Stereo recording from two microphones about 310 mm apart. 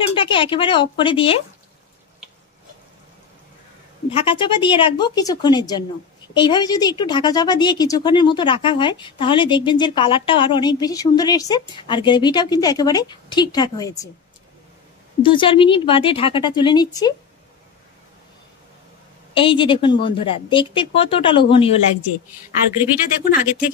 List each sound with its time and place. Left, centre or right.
0.1 s speech: centre
4.1 s speech: centre
15.2 s speech: centre
19.3 s speech: centre
23.2 s speech: left